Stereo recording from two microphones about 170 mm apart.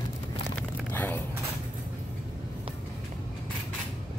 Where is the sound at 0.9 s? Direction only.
10° left (ahead or behind).